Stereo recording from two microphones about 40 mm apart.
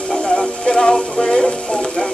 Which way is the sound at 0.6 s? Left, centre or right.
Centre.